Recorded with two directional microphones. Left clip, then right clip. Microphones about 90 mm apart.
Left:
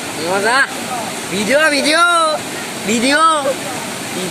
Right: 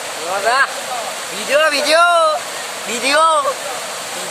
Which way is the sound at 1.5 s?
20° right (ahead or behind).